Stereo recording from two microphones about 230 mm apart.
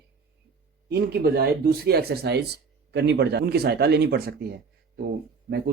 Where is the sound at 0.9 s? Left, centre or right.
Right.